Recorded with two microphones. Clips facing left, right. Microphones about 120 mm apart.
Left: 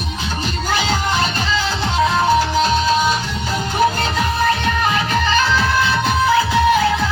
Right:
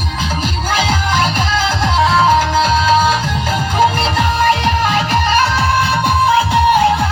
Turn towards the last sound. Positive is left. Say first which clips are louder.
# right 4 dB
turn(degrees=-60)  # may be behind; listen again after turning